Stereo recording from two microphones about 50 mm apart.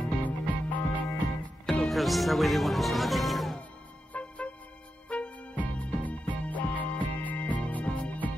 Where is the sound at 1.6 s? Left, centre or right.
Centre.